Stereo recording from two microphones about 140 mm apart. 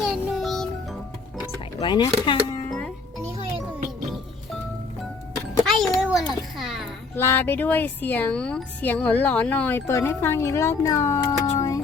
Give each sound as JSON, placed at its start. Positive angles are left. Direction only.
{"t": 0.0, "sound": "music", "side_deg": 0}
{"t": 1.8, "sound": "speech", "side_deg": 30}
{"t": 2.6, "sound": "music", "side_deg": 5}
{"t": 5.6, "sound": "a sound", "side_deg": 0}
{"t": 7.2, "sound": "speech", "side_deg": 15}